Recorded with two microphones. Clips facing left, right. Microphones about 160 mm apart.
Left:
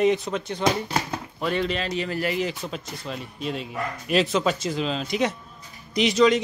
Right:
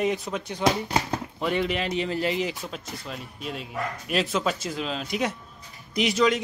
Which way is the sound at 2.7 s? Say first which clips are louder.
Left 3 dB; 5° right (ahead or behind).